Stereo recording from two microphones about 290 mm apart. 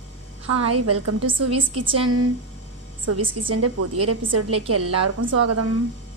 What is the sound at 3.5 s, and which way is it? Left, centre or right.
A woman's voice, right.